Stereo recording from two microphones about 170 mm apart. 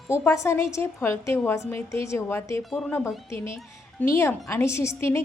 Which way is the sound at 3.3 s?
15° left (ahead or behind).